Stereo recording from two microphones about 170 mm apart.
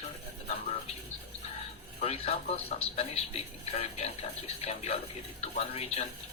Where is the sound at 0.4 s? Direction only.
40° left (ahead or behind).